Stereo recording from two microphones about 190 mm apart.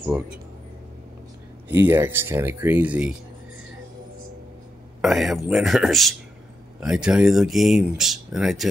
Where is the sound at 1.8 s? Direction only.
10° right (ahead or behind).